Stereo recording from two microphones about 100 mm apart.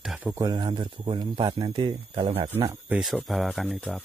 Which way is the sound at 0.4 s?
45° right (ahead or behind).